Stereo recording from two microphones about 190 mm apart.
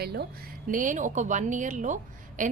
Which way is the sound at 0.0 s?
55° right (ahead or behind).